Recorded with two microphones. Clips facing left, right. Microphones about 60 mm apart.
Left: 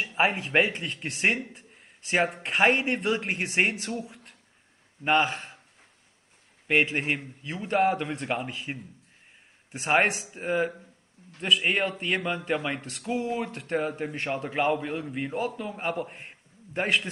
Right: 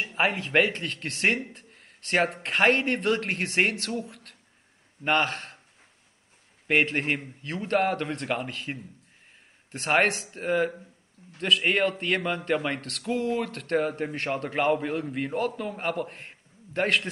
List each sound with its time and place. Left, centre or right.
0.5 s speech: centre
1.5 s a sound: centre
2.3 s speech: centre
6.7 s speech: centre